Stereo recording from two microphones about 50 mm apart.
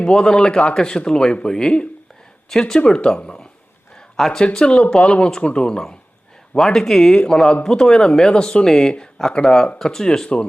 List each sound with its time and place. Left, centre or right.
0.1 s speech: centre